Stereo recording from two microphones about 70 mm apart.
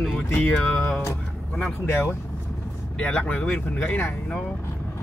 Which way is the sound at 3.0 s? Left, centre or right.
Centre.